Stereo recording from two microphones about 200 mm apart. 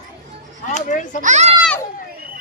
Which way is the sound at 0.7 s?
35° left (ahead or behind).